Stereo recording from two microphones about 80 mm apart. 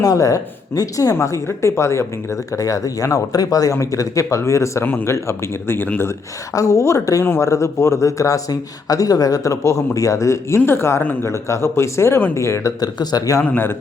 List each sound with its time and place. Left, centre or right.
0.0 s speech: left
1.1 s speech: left
12.8 s speech: left